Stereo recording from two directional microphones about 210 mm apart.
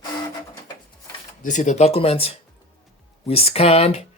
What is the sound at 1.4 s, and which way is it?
Speech, 35° left (ahead or behind).